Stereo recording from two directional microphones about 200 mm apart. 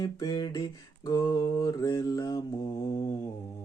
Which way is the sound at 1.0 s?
15° left (ahead or behind).